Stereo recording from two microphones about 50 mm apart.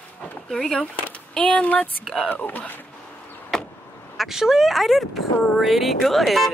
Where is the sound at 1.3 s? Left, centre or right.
Left.